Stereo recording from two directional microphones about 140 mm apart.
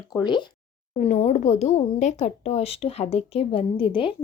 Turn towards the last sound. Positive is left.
turn(degrees=40)  # may be behind; listen again after turning